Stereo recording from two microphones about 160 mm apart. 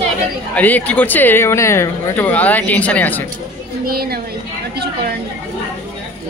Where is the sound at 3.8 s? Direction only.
75° right (ahead or behind).